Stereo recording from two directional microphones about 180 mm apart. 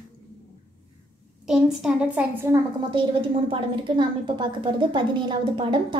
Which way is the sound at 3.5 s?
25° right (ahead or behind).